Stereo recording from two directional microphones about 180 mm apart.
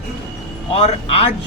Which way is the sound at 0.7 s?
35° left (ahead or behind).